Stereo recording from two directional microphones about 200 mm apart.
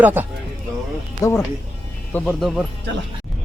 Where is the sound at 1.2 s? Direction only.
15° left (ahead or behind).